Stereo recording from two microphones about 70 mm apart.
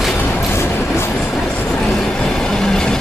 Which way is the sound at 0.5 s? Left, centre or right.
Left.